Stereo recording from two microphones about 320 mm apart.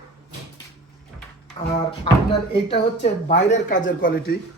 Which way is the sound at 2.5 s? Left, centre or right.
Centre.